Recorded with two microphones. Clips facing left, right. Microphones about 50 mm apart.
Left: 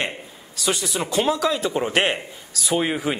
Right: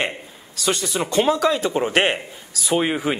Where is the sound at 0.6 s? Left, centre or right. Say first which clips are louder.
Right 2 dB; centre.